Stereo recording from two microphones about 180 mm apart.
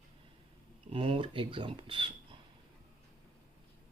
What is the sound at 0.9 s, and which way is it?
Speech, 30° right (ahead or behind).